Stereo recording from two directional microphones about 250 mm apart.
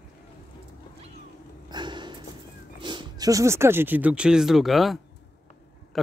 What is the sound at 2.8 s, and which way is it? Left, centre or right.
Speech, centre.